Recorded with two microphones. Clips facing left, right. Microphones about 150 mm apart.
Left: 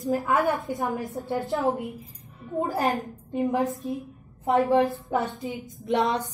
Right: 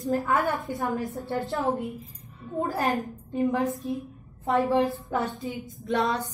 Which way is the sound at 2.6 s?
20° left (ahead or behind).